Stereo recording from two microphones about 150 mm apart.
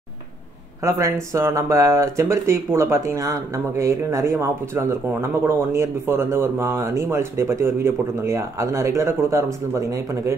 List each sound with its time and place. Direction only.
0.8 s speech: 20° right (ahead or behind)